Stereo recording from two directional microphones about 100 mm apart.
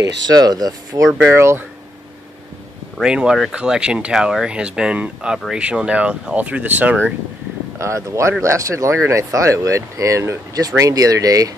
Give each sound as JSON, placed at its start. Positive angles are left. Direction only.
{"t": 0.0, "sound": "speech", "side_deg": -40}
{"t": 3.0, "sound": "speech", "side_deg": -5}
{"t": 7.8, "sound": "speech", "side_deg": -30}